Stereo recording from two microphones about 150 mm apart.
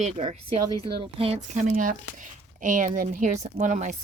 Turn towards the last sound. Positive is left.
turn(degrees=-60)  # may be behind; listen again after turning